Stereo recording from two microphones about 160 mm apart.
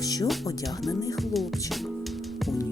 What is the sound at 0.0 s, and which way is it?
Music, 25° left (ahead or behind).